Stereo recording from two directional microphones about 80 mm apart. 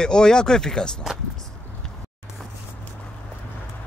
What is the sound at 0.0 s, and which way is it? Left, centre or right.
Speech, centre.